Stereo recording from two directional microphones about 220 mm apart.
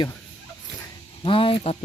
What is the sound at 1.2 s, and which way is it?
Speech, 25° left (ahead or behind).